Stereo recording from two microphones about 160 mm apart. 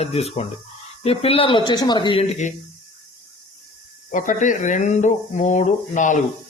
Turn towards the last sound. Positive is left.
turn(degrees=50)  # may be behind; listen again after turning